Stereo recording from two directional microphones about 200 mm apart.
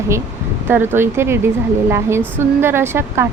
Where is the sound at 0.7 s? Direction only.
10° right (ahead or behind).